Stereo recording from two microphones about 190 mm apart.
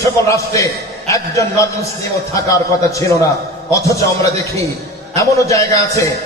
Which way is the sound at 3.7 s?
15° left (ahead or behind).